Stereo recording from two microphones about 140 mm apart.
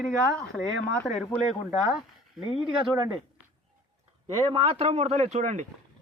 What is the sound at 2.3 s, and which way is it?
Speech, 40° left (ahead or behind).